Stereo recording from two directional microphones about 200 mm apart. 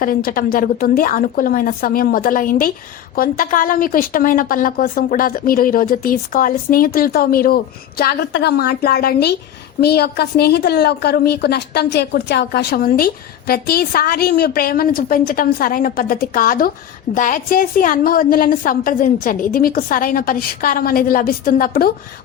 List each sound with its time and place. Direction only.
0.0 s speech: 45° left (ahead or behind)